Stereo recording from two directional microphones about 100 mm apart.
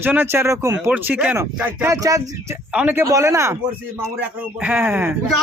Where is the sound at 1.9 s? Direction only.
35° right (ahead or behind).